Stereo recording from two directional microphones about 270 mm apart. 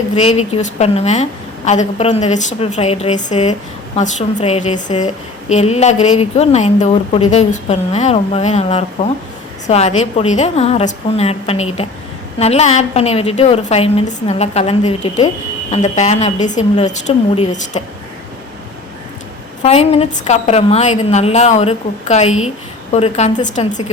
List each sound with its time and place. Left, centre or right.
0.1 s a woman's voice: left
19.6 s a woman's voice: left